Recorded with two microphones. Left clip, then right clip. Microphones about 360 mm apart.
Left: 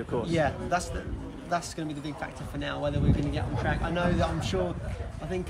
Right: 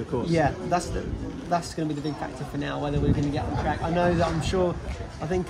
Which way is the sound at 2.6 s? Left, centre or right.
Centre.